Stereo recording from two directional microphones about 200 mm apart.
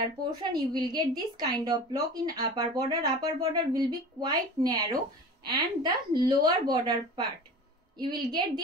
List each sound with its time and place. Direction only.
0.0 s a woman's voice: 20° right (ahead or behind)